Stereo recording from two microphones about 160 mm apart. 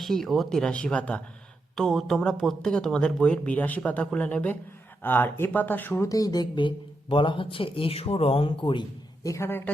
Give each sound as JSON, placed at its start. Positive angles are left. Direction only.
{"t": 0.0, "sound": "speech", "side_deg": 0}
{"t": 9.2, "sound": "a woman's voice", "side_deg": 20}